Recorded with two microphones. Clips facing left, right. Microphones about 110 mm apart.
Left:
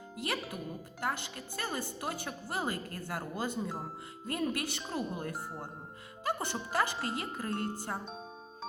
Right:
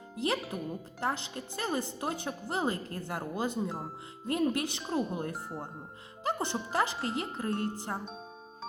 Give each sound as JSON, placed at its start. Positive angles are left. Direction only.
{"t": 0.4, "sound": "speech", "side_deg": 0}
{"t": 1.0, "sound": "a woman's voice", "side_deg": -25}
{"t": 3.7, "sound": "speech", "side_deg": 0}
{"t": 4.3, "sound": "a woman's voice", "side_deg": -20}
{"t": 5.3, "sound": "speech", "side_deg": 0}
{"t": 6.2, "sound": "a woman's voice", "side_deg": -20}